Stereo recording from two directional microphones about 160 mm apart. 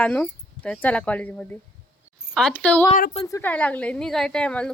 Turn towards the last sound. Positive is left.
turn(degrees=5)  # may be behind; listen again after turning